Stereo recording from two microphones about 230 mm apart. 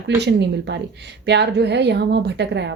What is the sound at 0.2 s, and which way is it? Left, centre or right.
Speech, right.